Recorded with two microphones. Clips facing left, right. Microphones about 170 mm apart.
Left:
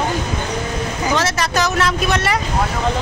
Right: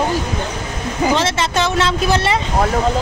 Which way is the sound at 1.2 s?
25° right (ahead or behind).